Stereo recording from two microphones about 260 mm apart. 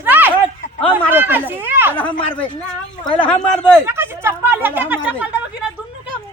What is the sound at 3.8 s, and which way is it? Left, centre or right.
Speech, centre.